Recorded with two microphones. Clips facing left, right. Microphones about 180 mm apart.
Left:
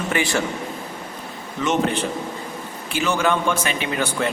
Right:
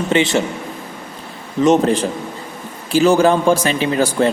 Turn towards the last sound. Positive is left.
turn(degrees=-35)  # may be behind; listen again after turning